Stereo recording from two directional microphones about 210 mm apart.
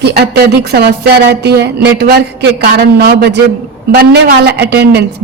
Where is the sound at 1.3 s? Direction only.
50° right (ahead or behind).